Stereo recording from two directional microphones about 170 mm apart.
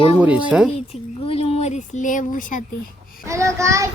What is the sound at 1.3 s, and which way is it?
Speech, 40° left (ahead or behind).